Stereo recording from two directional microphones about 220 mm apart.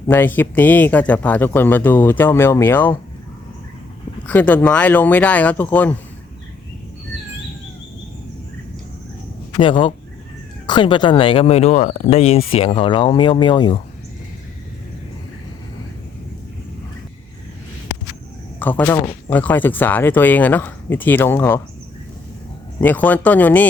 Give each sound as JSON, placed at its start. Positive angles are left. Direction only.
{"t": 0.1, "sound": "a man's voice", "side_deg": 10}
{"t": 4.3, "sound": "a man's voice", "side_deg": 5}
{"t": 9.6, "sound": "speech", "side_deg": 25}
{"t": 18.6, "sound": "a man's voice", "side_deg": 10}
{"t": 22.8, "sound": "a man's voice", "side_deg": 10}